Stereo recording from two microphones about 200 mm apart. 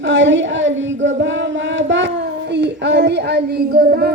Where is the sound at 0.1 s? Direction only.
65° right (ahead or behind).